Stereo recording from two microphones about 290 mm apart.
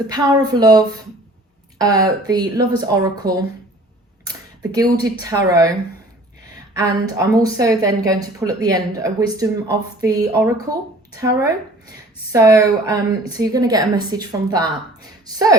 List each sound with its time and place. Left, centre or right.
0.1 s speech: centre
4.3 s a sound: centre
5.0 s speech: centre
7.0 s speech: centre